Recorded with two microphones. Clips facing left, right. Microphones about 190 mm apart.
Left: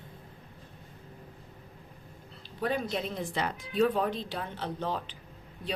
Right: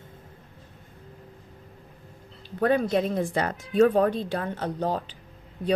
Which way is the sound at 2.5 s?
50° right (ahead or behind).